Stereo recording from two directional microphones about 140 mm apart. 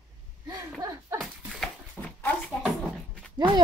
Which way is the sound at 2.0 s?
5° left (ahead or behind).